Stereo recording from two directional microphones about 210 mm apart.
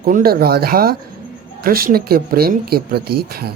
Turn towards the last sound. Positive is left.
turn(degrees=-50)  # may be behind; listen again after turning